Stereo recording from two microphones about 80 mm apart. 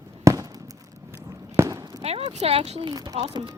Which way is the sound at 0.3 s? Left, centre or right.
Right.